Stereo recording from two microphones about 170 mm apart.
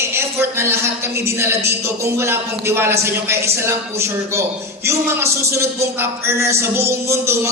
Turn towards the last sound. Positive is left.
turn(degrees=-15)  # may be behind; listen again after turning